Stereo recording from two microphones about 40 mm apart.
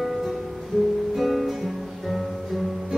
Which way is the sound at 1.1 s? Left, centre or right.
Centre.